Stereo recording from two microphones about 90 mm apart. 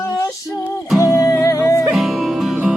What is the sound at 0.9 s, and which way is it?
Music, 40° left (ahead or behind).